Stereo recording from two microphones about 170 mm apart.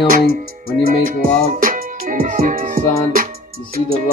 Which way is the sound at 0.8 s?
55° right (ahead or behind).